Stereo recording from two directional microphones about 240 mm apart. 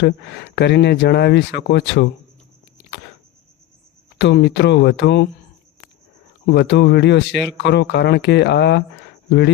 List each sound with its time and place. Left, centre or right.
0.0 s speech: left
4.2 s speech: left
6.4 s speech: left